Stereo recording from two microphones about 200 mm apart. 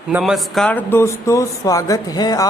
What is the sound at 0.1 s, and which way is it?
Speech, centre (ahead or behind).